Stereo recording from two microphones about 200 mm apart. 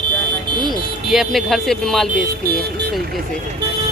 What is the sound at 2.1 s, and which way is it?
Speech, 50° right (ahead or behind).